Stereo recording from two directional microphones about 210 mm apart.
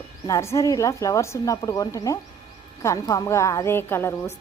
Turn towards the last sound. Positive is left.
turn(degrees=10)  # may be behind; listen again after turning